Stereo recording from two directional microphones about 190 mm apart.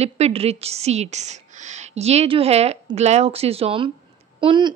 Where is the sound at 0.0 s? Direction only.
30° right (ahead or behind).